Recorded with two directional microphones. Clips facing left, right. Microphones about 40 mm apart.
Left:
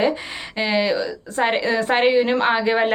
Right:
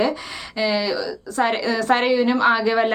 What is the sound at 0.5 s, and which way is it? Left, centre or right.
A woman's voice, left.